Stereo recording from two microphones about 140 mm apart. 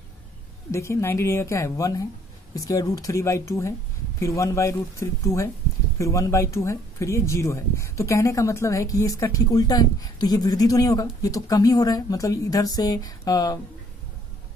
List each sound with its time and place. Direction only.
0.7 s speech: 20° left (ahead or behind)